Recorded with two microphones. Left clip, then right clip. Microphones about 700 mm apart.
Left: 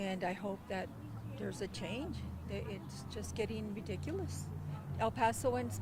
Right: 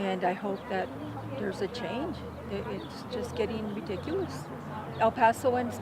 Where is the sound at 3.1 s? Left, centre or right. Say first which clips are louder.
Right 9 dB; left.